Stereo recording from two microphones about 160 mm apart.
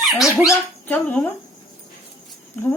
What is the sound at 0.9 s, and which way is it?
Speech, 10° left (ahead or behind).